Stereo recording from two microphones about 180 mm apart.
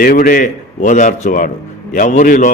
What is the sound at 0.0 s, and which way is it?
A man's voice, 50° left (ahead or behind).